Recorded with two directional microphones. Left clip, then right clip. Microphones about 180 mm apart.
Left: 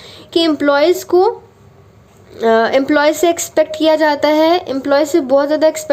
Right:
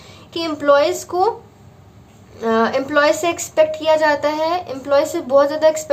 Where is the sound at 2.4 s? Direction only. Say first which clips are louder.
Left 6 dB; 40° left (ahead or behind).